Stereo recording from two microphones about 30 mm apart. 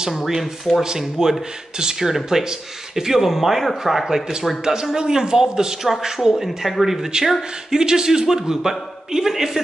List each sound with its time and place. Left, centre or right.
0.8 s a man's voice: centre
4.0 s a man's voice: right
4.4 s speech: centre
4.9 s a man's voice: right; by 7.0 s centre
7.0 s a man's voice: right